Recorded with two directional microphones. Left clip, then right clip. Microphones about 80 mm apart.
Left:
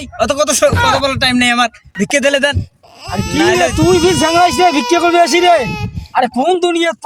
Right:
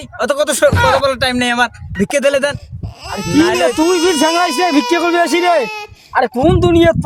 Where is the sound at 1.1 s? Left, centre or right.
Right.